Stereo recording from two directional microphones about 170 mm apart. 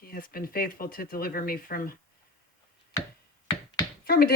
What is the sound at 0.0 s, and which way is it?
Speech, 60° left (ahead or behind).